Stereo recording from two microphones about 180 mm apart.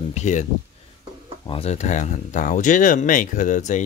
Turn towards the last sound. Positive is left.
turn(degrees=45)  # may be behind; listen again after turning